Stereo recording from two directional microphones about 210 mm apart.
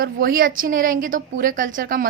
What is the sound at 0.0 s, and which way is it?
A woman's voice, 45° right (ahead or behind).